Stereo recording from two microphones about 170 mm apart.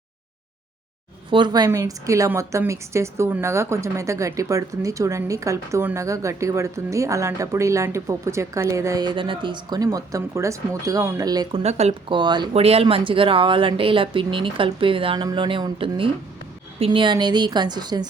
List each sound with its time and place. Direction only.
1.3 s a woman's voice: 25° right (ahead or behind)
11.6 s speech: 40° right (ahead or behind); by 18.1 s 25° right (ahead or behind)